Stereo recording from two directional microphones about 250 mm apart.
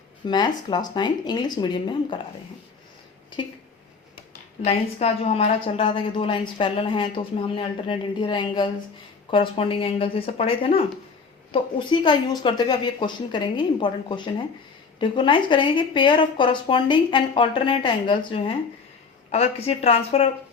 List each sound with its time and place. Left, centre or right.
0.3 s speech: centre
4.6 s a woman's voice: left